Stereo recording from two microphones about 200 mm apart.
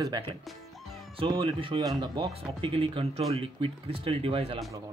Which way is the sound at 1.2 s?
25° right (ahead or behind).